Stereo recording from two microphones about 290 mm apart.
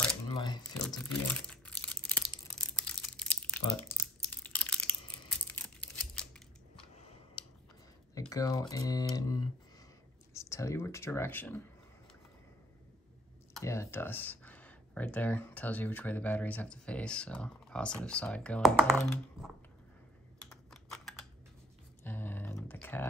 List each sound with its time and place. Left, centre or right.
1.0 s crumpling: centre
7.4 s clicking: centre
8.1 s speech: centre
13.5 s speech: centre
20.3 s computer keyboard: centre
22.0 s a sound: centre